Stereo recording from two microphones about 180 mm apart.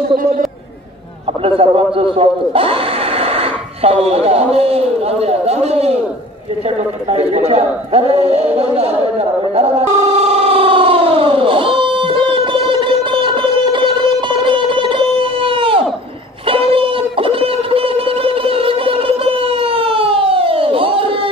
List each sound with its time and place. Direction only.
1.4 s speech: 30° right (ahead or behind)
7.1 s speech: 35° right (ahead or behind)
10.1 s music: 35° right (ahead or behind)
16.4 s a sound: 30° right (ahead or behind)